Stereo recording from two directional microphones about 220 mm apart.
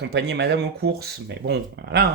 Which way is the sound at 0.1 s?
50° right (ahead or behind).